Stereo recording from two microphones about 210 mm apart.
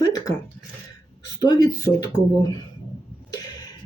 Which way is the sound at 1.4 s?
20° left (ahead or behind).